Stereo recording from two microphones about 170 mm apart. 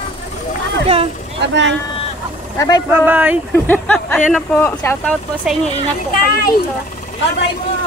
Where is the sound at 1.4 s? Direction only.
90° right.